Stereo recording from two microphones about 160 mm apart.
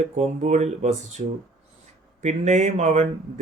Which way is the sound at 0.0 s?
45° right (ahead or behind).